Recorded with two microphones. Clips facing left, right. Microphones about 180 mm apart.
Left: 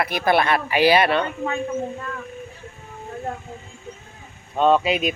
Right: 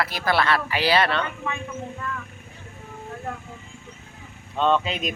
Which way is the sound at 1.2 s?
35° left (ahead or behind).